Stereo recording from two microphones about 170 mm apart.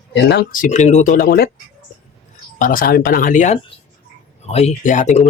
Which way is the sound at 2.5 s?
55° left (ahead or behind).